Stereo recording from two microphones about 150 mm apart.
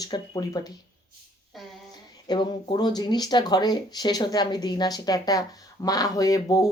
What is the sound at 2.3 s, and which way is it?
Speech, 30° left (ahead or behind).